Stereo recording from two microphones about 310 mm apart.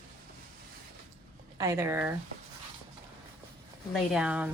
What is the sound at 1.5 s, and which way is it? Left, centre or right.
Speech, centre.